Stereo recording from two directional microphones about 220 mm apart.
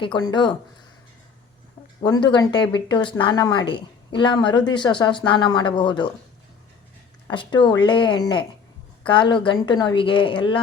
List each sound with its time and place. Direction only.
0.0 s speech: 20° left (ahead or behind)
2.0 s speech: 20° left (ahead or behind)
7.3 s speech: 20° left (ahead or behind)